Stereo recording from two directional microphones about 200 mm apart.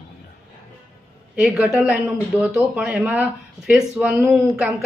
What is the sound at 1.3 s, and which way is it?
Speech, 5° right (ahead or behind).